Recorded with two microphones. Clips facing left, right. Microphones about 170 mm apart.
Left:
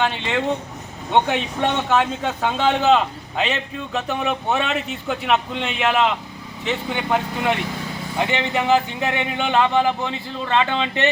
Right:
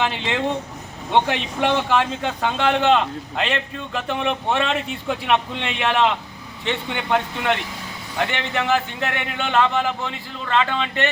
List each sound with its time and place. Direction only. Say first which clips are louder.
1.1 s a man's voice: left 1 dB; centre (ahead or behind)
8.2 s speech: left 2 dB; 15° left (ahead or behind)